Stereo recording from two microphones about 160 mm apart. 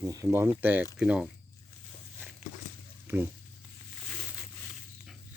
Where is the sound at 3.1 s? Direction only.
15° right (ahead or behind).